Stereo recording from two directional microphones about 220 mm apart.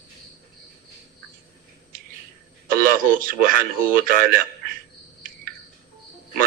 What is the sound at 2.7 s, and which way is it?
A man's voice, 40° right (ahead or behind).